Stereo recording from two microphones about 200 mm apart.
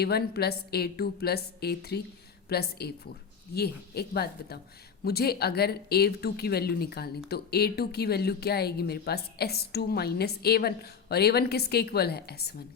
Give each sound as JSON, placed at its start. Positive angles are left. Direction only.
{"t": 0.0, "sound": "speech", "side_deg": 55}